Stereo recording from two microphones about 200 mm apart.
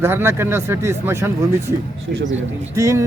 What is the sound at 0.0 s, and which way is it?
A man's voice, 10° right (ahead or behind).